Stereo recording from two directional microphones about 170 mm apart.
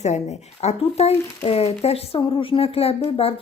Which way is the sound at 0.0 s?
40° left (ahead or behind).